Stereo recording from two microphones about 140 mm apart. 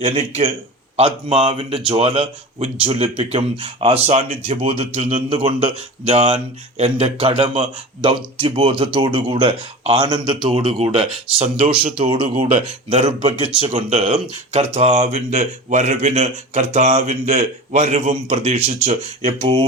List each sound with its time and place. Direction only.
0.2 s a man's voice: 55° right (ahead or behind)
0.9 s speech: 45° right (ahead or behind)